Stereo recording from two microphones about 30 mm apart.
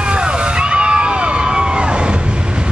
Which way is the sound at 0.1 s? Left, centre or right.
Right.